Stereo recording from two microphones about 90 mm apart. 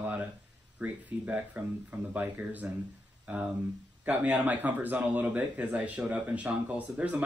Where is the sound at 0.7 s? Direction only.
15° right (ahead or behind).